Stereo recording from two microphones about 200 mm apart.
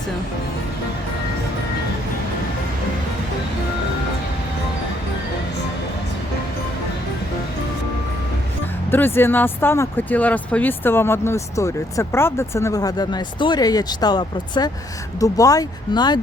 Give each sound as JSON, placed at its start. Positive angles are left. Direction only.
{"t": 8.9, "sound": "speech", "side_deg": 10}